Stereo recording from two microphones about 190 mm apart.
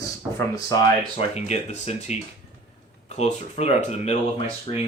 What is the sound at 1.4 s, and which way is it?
Speech, 35° left (ahead or behind).